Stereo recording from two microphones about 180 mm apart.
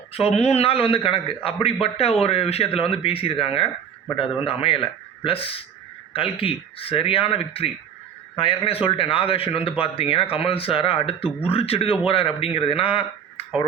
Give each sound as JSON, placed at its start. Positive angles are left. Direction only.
{"t": 0.1, "sound": "a man's voice", "side_deg": 35}